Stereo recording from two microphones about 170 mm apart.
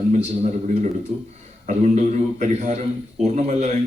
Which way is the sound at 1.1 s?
50° right (ahead or behind).